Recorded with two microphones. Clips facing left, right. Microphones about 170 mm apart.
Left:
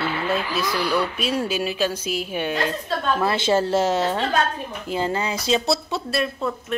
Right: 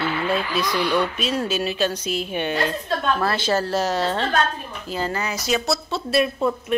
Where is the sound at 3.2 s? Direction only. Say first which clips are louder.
Left 2 dB; 25° left (ahead or behind).